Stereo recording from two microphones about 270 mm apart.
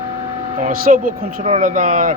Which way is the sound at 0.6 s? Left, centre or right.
Right.